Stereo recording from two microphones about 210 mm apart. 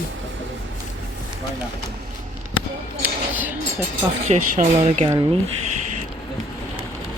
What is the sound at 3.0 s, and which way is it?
Speech, 10° right (ahead or behind).